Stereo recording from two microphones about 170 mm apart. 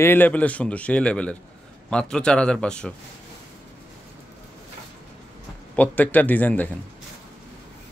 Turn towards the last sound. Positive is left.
turn(degrees=10)  # may be behind; listen again after turning